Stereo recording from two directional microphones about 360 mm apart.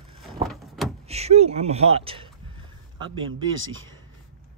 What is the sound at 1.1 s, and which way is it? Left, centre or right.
A man's voice, centre.